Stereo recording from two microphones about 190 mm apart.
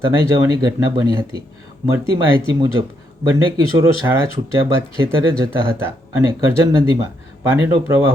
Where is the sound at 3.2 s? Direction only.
20° right (ahead or behind).